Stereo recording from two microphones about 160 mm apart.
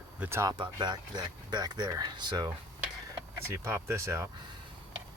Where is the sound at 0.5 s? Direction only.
30° right (ahead or behind).